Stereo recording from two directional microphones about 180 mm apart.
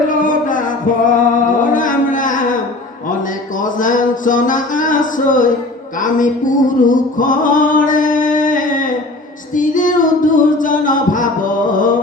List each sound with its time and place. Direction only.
0.1 s music: 45° left (ahead or behind)
3.6 s a sound: 45° left (ahead or behind)
6.0 s music: 45° left (ahead or behind)